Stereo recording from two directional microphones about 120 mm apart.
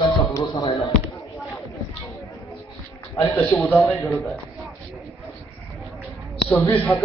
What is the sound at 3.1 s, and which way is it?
Speech, 25° left (ahead or behind).